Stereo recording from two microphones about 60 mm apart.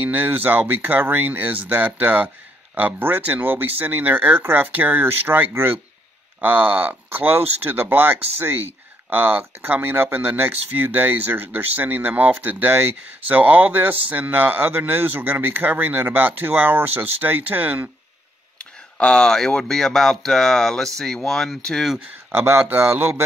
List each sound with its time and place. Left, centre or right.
0.0 s speech: right
18.6 s speech: centre
22.3 s speech: right